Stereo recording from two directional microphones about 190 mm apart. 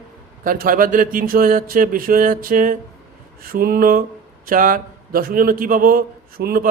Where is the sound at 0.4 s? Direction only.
50° right (ahead or behind).